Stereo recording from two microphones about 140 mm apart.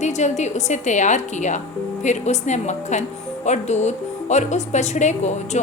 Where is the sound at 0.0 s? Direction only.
55° left (ahead or behind).